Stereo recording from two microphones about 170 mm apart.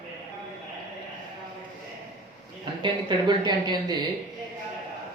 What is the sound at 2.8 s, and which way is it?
Speech, 25° right (ahead or behind).